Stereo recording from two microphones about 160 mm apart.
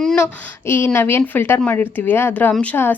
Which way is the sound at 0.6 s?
15° left (ahead or behind).